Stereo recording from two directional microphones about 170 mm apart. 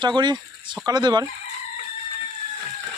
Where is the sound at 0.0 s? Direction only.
25° right (ahead or behind).